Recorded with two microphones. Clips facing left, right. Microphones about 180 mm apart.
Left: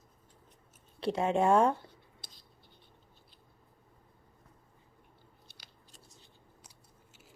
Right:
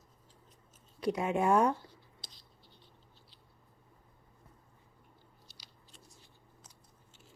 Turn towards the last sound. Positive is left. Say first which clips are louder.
# left 1 dB
turn(degrees=55)  # may be behind; listen again after turning